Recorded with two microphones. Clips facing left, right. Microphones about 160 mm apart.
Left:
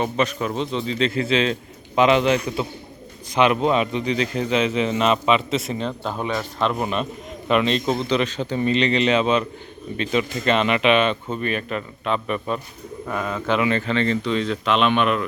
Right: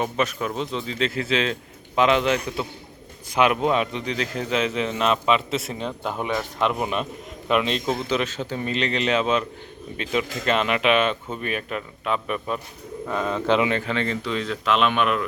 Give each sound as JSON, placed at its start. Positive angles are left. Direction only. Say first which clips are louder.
{"t": 0.0, "sound": "a man's voice", "louder": "left 2 dB", "side_deg": -5}
{"t": 13.4, "sound": "a man's voice", "louder": "right 2 dB", "side_deg": -30}
{"t": 13.7, "sound": "a man's voice", "louder": "left 4 dB", "side_deg": -10}